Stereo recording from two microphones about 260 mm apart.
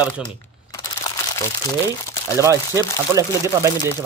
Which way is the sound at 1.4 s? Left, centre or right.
Centre.